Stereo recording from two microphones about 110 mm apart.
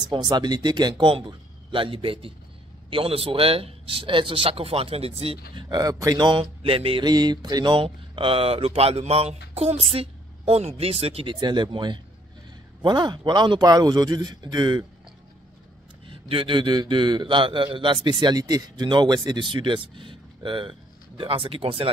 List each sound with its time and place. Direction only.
0.0 s a man's voice: 40° right (ahead or behind); by 5.7 s 60° right (ahead or behind)
5.7 s a man's voice: 35° right (ahead or behind); by 7.1 s 55° right (ahead or behind)
7.1 s a woman's voice: 40° right (ahead or behind); by 11.3 s 60° right (ahead or behind)
11.3 s a man's voice: 45° right (ahead or behind)
16.1 s a man's voice: 55° right (ahead or behind)